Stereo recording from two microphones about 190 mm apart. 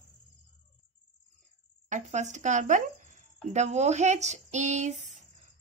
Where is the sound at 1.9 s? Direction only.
40° right (ahead or behind).